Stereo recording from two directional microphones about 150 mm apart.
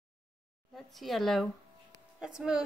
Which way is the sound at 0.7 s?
Centre (ahead or behind).